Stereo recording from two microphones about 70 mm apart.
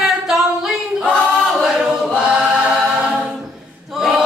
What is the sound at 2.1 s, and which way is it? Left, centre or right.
Choir, centre.